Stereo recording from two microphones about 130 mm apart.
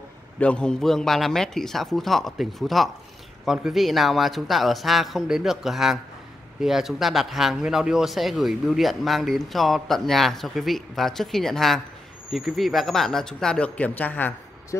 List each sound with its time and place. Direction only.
0.4 s speech: 10° left (ahead or behind)